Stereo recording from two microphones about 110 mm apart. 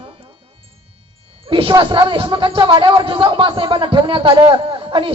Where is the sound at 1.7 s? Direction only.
45° right (ahead or behind).